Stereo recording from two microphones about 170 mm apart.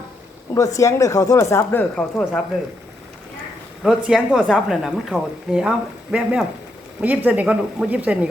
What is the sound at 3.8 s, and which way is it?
A man's voice, 5° right (ahead or behind).